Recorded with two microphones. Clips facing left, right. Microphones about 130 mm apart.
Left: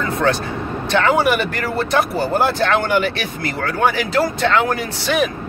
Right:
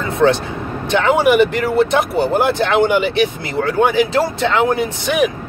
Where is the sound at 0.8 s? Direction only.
20° right (ahead or behind).